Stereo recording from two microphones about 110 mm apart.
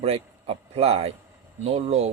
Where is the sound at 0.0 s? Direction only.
60° right (ahead or behind).